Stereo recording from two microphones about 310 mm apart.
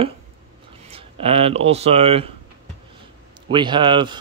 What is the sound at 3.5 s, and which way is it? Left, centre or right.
Speech, centre.